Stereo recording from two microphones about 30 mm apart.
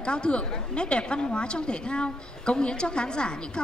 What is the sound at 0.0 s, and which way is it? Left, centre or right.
A woman's voice, left.